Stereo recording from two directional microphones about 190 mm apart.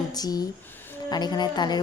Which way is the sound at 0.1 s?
20° left (ahead or behind).